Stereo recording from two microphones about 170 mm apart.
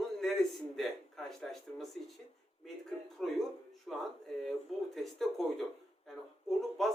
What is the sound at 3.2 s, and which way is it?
A man's voice, 5° left (ahead or behind).